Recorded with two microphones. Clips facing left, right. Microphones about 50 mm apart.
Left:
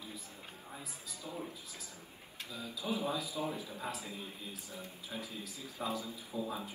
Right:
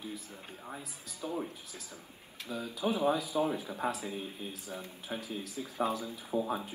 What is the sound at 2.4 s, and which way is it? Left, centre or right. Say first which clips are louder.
Speech: right 7 dB; right.